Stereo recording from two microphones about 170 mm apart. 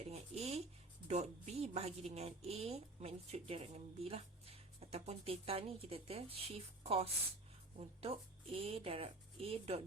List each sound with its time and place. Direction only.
0.0 s a sound: 40° right (ahead or behind)
1.0 s a woman's voice: 40° right (ahead or behind)
8.5 s a woman's voice: 35° right (ahead or behind)